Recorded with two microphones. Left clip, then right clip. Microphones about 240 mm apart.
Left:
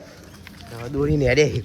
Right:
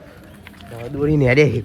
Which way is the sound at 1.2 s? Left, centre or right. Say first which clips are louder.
Right 3 dB; centre.